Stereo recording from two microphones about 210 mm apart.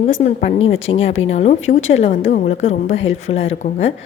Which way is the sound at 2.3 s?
30° left (ahead or behind).